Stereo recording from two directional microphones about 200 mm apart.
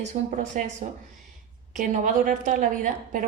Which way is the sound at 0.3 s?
35° right (ahead or behind).